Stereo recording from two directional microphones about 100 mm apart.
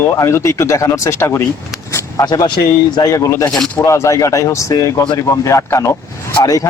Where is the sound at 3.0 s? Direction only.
35° left (ahead or behind).